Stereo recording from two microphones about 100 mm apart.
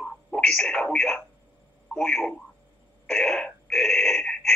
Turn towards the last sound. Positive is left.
turn(degrees=10)  # may be behind; listen again after turning